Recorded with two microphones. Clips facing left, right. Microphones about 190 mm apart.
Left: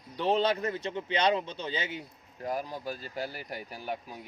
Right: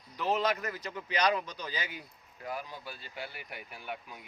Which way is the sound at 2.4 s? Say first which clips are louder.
Left 6 dB; 40° left (ahead or behind).